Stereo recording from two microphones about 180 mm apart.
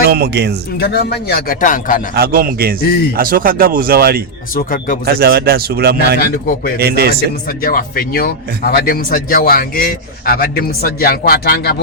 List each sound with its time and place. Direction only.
0.1 s a man's voice: 65° right (ahead or behind)
0.8 s a man's voice: 60° left (ahead or behind)
2.1 s a man's voice: 60° right (ahead or behind)
4.5 s a man's voice: 50° left (ahead or behind)
5.0 s a man's voice: 60° right (ahead or behind)
7.4 s speech: 55° left (ahead or behind)